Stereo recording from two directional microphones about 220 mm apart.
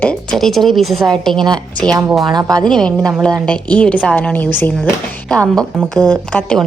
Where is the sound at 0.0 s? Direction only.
5° left (ahead or behind).